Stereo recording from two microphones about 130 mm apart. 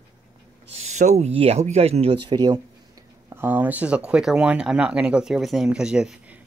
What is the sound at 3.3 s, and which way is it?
Speech, 15° right (ahead or behind).